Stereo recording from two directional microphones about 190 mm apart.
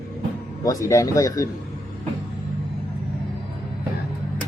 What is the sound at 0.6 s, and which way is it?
Speech, 15° left (ahead or behind).